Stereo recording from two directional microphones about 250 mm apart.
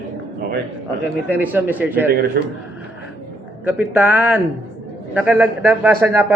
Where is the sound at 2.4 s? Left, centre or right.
Right.